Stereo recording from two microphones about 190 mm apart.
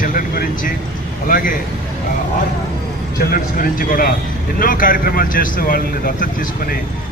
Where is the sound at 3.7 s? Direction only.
45° left (ahead or behind).